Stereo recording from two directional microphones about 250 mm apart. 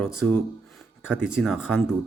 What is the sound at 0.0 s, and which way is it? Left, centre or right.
Speech, centre.